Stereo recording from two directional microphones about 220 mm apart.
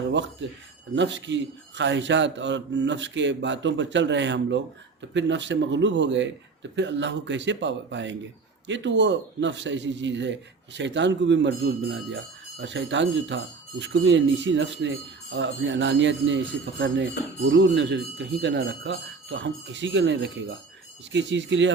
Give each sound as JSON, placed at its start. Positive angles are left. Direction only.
{"t": 0.1, "sound": "a man's voice", "side_deg": -55}